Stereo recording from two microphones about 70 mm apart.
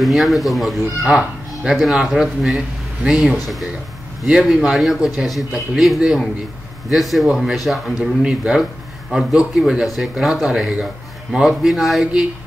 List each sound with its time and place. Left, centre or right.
0.0 s a man's voice: centre